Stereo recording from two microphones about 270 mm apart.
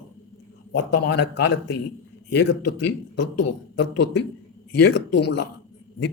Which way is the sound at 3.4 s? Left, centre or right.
Left.